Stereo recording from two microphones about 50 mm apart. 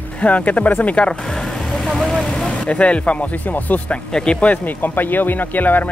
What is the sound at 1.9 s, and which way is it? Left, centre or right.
Speech, centre.